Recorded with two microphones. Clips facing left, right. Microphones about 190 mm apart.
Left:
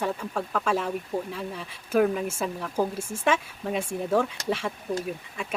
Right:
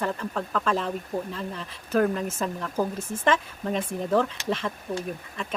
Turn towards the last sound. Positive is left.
turn(degrees=10)  # may be behind; listen again after turning